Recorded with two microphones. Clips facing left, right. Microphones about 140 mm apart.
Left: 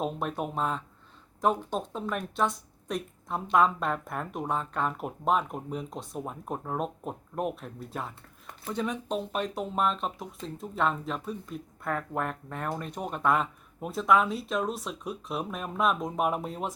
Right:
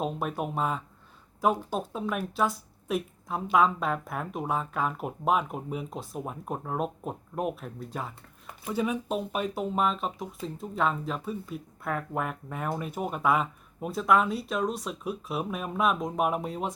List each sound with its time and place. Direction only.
0.0 s speech: centre (ahead or behind)